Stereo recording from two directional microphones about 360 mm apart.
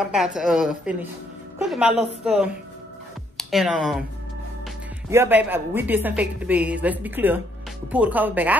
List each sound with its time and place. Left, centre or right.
0.1 s a woman's voice: centre
5.1 s a woman's voice: centre